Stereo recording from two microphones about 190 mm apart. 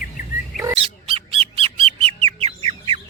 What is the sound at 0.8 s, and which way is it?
Bird, 30° right (ahead or behind).